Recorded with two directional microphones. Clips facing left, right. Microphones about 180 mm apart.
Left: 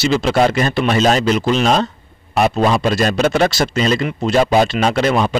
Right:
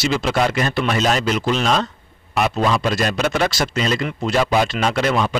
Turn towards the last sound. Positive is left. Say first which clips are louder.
# left 3 dB
turn(degrees=30)  # may be behind; listen again after turning